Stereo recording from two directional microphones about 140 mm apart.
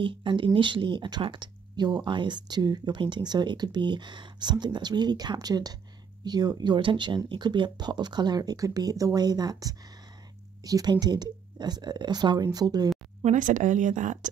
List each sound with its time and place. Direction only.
0.0 s speech: 35° right (ahead or behind)
13.2 s speech: 65° right (ahead or behind)